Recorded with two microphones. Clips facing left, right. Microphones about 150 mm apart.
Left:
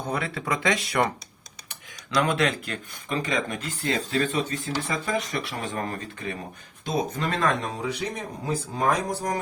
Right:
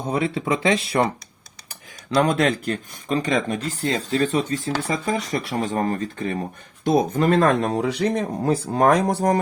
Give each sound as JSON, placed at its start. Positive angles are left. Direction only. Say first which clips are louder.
{"t": 0.0, "sound": "speech", "louder": "right 6 dB", "side_deg": -25}
{"t": 6.8, "sound": "speech", "louder": "right 9 dB", "side_deg": -55}